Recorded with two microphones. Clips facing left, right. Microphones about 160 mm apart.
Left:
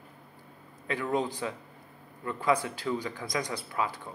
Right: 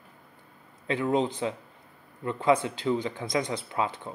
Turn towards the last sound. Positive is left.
turn(degrees=-25)  # may be behind; listen again after turning